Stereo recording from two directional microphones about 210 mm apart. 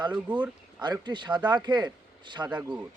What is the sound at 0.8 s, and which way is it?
Speech, 20° right (ahead or behind).